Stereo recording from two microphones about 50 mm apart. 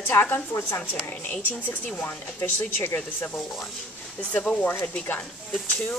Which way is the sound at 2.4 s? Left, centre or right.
Left.